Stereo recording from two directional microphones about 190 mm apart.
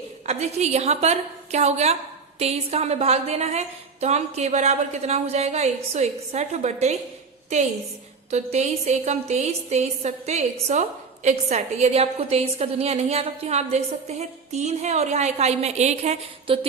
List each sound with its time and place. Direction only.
0.3 s a woman's voice: 35° right (ahead or behind)